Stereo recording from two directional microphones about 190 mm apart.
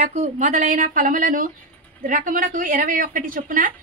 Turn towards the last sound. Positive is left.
turn(degrees=-45)  # may be behind; listen again after turning